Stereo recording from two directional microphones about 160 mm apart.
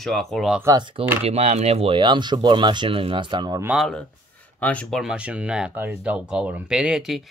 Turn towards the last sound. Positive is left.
turn(degrees=0)  # may be behind; listen again after turning